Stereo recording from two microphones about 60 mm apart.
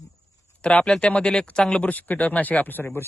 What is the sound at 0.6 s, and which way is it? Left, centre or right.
Speech, centre.